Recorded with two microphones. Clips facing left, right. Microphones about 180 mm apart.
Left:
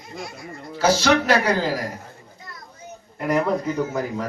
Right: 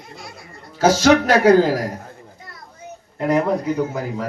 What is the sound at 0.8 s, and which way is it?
Speech, 45° right (ahead or behind).